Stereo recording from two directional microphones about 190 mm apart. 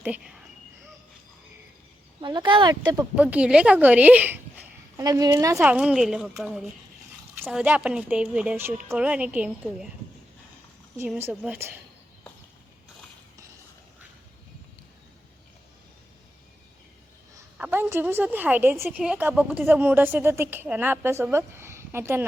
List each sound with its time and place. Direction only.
0.0 s speech: 5° right (ahead or behind)
2.2 s speech: 25° right (ahead or behind)
3.2 s a woman's voice: 5° right (ahead or behind)
5.5 s a woman's voice: 5° right (ahead or behind)
11.2 s a woman's voice: 10° right (ahead or behind)
17.6 s a woman's voice: 10° right (ahead or behind)